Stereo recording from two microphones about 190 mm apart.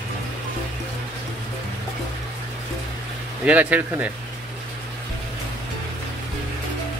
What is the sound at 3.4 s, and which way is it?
Speech, 5° right (ahead or behind).